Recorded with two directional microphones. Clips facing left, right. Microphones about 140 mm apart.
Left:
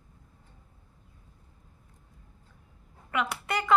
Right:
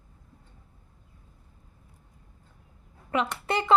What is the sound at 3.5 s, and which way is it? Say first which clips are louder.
Speech: right 3 dB; 30° right (ahead or behind).